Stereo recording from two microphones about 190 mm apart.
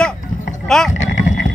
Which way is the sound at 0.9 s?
40° left (ahead or behind).